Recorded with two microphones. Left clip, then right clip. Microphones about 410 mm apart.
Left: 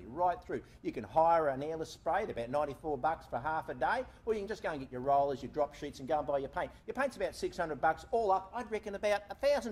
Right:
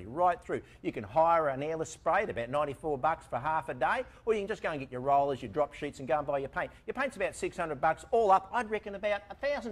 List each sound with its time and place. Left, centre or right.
0.1 s speech: right
8.2 s a man's voice: right
8.6 s speech: right